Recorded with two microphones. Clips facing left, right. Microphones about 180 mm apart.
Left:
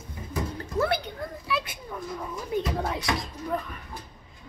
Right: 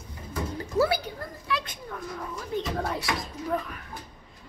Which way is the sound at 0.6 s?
5° right (ahead or behind).